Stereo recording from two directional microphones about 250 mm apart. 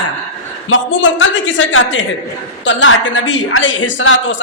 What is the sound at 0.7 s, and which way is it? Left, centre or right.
A woman's voice, left.